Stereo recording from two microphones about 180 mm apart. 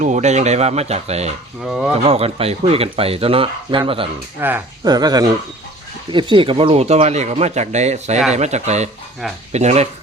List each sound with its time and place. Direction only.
0.0 s speech: 40° right (ahead or behind)
1.6 s speech: centre (ahead or behind)
2.0 s speech: 35° right (ahead or behind)
4.4 s speech: 10° right (ahead or behind)
4.8 s speech: 20° right (ahead or behind); by 9.9 s 40° right (ahead or behind)